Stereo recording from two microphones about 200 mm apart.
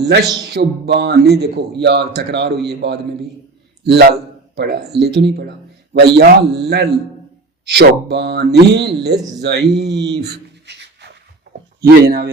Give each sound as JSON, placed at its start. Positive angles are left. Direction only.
{"t": 0.4, "sound": "a man's voice", "side_deg": -55}
{"t": 10.7, "sound": "a sound", "side_deg": -60}
{"t": 12.0, "sound": "speech", "side_deg": -50}